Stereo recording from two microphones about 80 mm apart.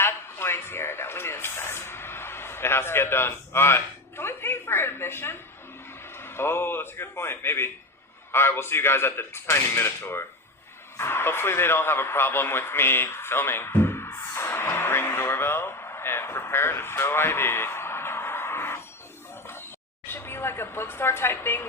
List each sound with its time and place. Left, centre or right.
0.0 s a sound: left
6.1 s a man's voice: left
20.1 s speech: left